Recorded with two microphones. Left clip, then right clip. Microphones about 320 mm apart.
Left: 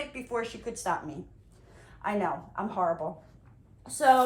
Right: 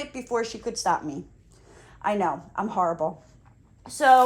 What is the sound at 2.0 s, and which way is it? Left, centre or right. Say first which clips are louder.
Speech: right 5 dB; centre.